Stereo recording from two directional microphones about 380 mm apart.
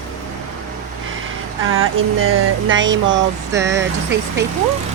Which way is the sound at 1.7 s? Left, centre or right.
Right.